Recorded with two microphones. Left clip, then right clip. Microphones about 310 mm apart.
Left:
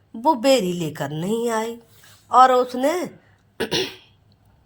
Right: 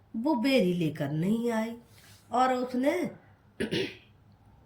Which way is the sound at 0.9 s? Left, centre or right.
Left.